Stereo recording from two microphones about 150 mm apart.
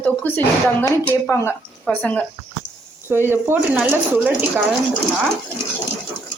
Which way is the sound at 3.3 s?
15° right (ahead or behind).